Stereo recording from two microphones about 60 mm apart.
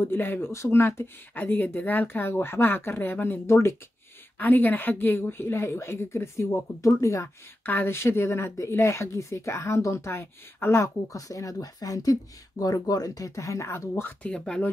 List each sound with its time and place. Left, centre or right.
0.0 s speech: left
1.4 s speech: left
7.6 s speech: left
11.1 s speech: left
14.2 s speech: centre